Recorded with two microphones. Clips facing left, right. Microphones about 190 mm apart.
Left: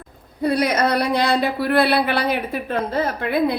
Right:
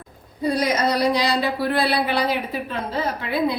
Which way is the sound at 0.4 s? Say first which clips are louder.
Left 2 dB; 60° left (ahead or behind).